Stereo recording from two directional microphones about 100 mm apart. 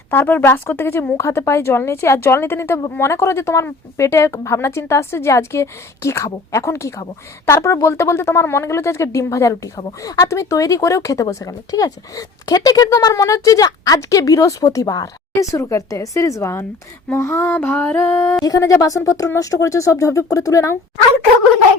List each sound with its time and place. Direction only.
0.1 s a woman's voice: 20° left (ahead or behind)
18.4 s speech: 35° left (ahead or behind)